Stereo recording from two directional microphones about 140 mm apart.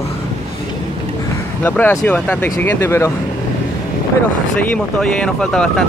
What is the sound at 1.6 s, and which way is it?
Speech, 15° left (ahead or behind).